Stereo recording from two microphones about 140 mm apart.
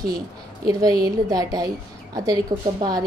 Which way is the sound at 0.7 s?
25° right (ahead or behind).